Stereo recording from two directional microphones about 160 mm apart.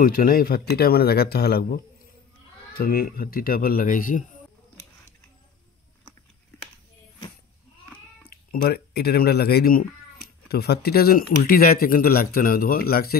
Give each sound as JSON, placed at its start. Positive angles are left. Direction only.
{"t": 0.0, "sound": "speech", "side_deg": 60}
{"t": 8.3, "sound": "speech", "side_deg": 75}